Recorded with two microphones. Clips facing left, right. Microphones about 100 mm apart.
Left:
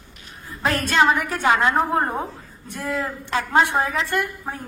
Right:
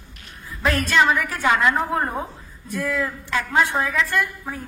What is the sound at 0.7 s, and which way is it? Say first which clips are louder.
A woman's voice: even; 30° left (ahead or behind).